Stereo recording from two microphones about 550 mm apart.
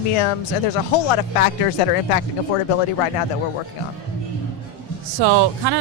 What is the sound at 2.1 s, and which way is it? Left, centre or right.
Speech, left.